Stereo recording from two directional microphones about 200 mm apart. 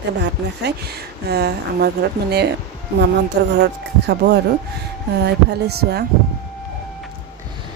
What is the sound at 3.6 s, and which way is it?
Speech, 55° right (ahead or behind).